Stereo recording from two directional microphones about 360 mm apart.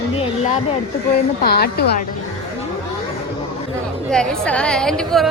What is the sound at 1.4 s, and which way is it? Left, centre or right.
Speech, left.